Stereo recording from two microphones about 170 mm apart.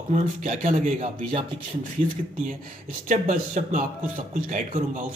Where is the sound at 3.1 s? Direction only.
50° right (ahead or behind).